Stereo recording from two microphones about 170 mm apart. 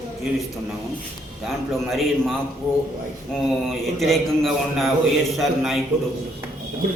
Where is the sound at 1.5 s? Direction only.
Centre (ahead or behind).